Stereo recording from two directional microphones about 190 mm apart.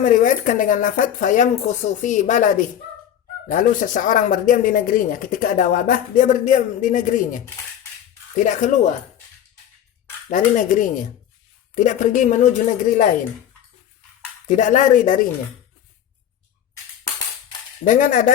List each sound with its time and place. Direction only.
0.0 s speech: 40° left (ahead or behind)
10.2 s speech: 40° left (ahead or behind)
14.5 s speech: 40° left (ahead or behind)
17.8 s speech: 45° left (ahead or behind)